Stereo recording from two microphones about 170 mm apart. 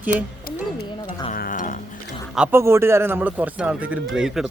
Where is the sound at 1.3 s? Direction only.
50° left (ahead or behind).